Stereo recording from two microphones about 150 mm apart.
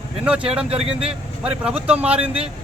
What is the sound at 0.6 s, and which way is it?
Speech, 40° right (ahead or behind).